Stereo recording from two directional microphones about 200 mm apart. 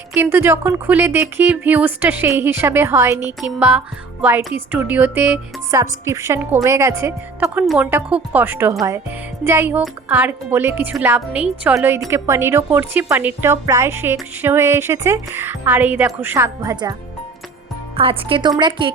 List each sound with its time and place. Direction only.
0.1 s a woman's voice: 10° right (ahead or behind)
17.9 s speech: 25° right (ahead or behind)